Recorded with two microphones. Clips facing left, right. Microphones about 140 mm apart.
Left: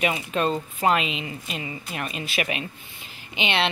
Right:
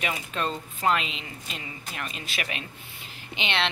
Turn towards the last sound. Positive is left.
turn(degrees=10)  # may be behind; listen again after turning